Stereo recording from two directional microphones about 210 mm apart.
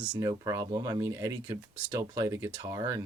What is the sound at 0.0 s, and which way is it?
Speech, 5° right (ahead or behind).